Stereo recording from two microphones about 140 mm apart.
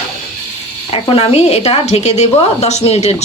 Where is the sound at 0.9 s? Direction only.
45° left (ahead or behind).